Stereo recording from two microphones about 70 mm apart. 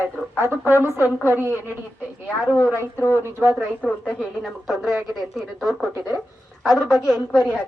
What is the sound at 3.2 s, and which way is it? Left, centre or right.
Speech, right.